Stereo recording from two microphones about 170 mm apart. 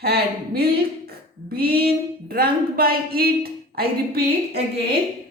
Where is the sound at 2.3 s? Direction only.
60° right (ahead or behind).